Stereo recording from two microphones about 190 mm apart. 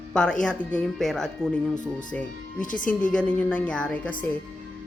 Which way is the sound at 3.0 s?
5° left (ahead or behind).